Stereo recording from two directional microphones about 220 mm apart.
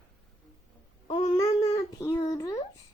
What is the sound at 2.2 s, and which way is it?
Speech, 15° left (ahead or behind).